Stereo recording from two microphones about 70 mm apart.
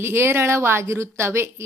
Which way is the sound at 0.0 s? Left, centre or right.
Right.